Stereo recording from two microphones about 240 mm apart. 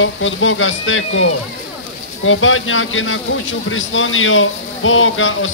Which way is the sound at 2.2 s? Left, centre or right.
Left.